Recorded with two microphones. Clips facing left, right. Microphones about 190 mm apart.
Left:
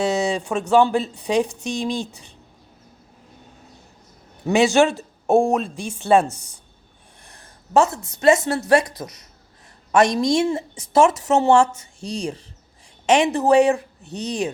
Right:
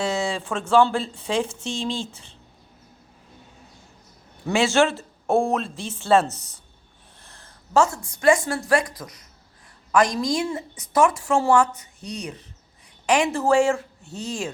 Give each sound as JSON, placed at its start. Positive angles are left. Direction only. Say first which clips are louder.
{"t": 0.0, "sound": "speech", "louder": "left 4 dB", "side_deg": 20}
{"t": 4.4, "sound": "a woman's voice", "louder": "left 4 dB", "side_deg": 15}
{"t": 9.9, "sound": "a woman's voice", "louder": "left 4 dB", "side_deg": 25}